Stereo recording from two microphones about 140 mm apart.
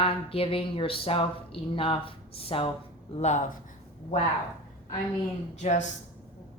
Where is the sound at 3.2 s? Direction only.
60° left (ahead or behind).